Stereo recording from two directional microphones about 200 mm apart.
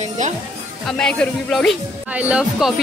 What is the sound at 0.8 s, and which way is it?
Speech, 5° left (ahead or behind).